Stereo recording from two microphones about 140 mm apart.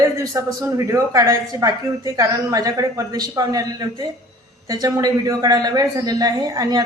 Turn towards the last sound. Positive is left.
turn(degrees=-25)  # may be behind; listen again after turning